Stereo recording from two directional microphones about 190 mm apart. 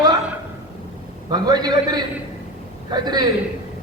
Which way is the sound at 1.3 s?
20° right (ahead or behind).